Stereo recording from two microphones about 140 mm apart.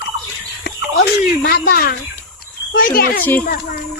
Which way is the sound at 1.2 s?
90° left.